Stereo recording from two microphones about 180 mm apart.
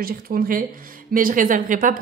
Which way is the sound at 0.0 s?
55° right (ahead or behind).